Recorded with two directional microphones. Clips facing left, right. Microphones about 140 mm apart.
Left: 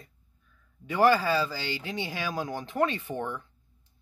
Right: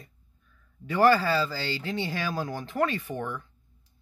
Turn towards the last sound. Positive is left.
turn(degrees=25)  # may be behind; listen again after turning